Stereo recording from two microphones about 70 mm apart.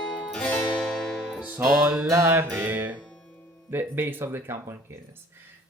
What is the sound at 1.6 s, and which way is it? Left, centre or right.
Speech, right.